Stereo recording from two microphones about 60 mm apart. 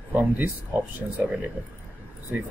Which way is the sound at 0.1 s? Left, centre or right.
Right.